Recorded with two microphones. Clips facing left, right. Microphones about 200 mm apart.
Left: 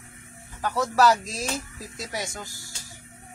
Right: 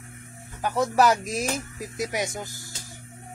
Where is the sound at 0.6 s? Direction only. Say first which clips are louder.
Right 1 dB; 20° right (ahead or behind).